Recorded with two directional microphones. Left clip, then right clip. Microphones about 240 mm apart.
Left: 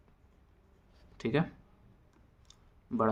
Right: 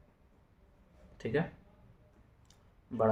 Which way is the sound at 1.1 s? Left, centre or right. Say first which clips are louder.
Left 2 dB; left.